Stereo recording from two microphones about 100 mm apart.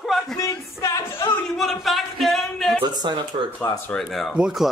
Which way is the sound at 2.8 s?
45° right (ahead or behind).